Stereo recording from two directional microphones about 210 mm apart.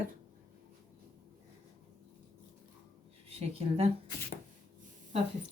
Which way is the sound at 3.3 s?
30° right (ahead or behind).